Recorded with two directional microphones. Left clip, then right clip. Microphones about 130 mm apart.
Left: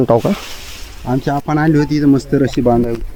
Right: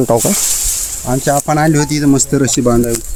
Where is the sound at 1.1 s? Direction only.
80° right.